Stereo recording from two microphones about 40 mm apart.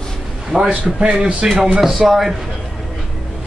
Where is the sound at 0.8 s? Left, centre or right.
Right.